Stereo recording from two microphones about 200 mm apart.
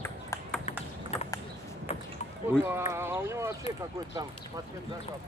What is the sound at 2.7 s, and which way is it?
Speech, 10° right (ahead or behind).